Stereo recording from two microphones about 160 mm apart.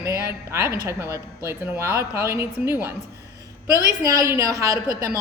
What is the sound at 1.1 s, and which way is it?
Speech, 15° right (ahead or behind).